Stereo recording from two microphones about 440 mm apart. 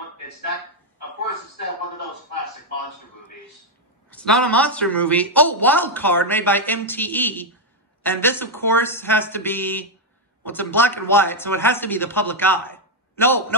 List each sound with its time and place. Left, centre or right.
4.1 s speech: centre